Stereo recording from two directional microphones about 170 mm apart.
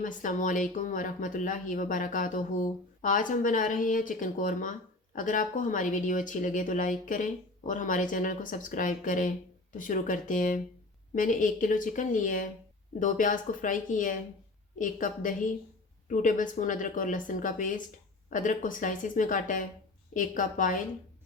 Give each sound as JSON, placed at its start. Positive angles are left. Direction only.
{"t": 0.0, "sound": "speech", "side_deg": 50}